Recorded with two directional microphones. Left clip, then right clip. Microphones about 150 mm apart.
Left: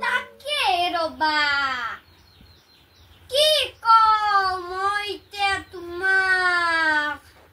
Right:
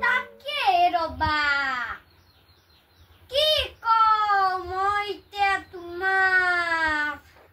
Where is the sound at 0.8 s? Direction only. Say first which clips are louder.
Right 1 dB; 15° right (ahead or behind).